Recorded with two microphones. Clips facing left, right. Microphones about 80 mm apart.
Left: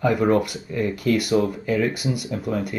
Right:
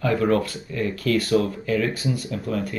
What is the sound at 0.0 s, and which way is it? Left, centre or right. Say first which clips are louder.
Speech: left 2 dB; centre.